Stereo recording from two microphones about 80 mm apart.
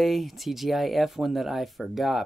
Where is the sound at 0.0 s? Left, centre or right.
Centre.